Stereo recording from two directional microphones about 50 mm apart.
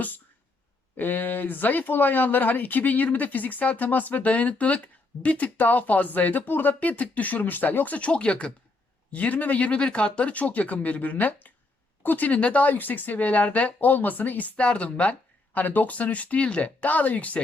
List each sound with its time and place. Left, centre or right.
0.9 s speech: left
7.9 s speech: left